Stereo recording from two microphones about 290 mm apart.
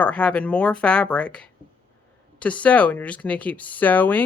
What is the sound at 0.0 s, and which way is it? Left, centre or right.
A woman's voice, centre.